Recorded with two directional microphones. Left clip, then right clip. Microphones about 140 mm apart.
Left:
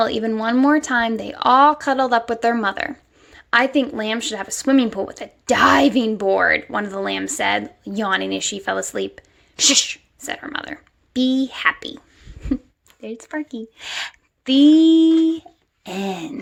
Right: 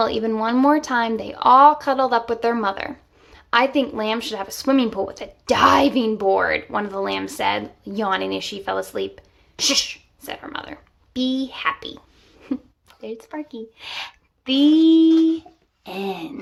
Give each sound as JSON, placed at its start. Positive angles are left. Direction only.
{"t": 0.0, "sound": "speech", "side_deg": 25}